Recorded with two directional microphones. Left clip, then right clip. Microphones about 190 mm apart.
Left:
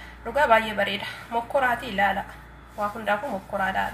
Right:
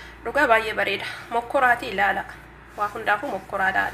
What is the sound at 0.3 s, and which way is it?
A woman's voice, 40° right (ahead or behind).